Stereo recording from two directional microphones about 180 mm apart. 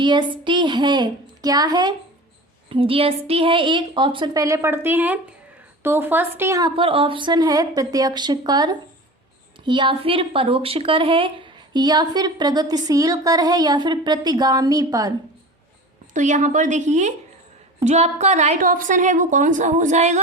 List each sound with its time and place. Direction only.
0.0 s a woman's voice: 25° right (ahead or behind)
16.1 s a woman's voice: 45° right (ahead or behind)